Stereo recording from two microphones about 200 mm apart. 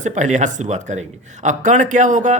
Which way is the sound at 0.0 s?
40° right (ahead or behind).